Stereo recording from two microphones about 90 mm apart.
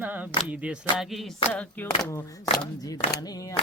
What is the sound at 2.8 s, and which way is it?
Speech, 45° left (ahead or behind).